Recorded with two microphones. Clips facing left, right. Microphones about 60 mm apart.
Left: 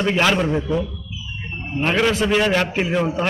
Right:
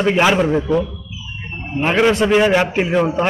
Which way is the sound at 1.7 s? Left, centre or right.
Centre.